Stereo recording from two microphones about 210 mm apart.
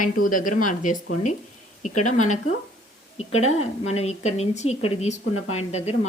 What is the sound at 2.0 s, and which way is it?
A woman's voice, 35° left (ahead or behind).